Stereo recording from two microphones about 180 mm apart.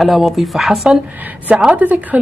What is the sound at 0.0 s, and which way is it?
A woman's voice, centre (ahead or behind).